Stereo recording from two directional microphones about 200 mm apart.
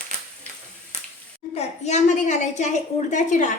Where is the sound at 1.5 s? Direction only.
35° left (ahead or behind).